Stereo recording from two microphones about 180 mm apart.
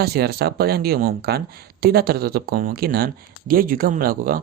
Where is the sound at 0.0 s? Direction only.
60° right (ahead or behind).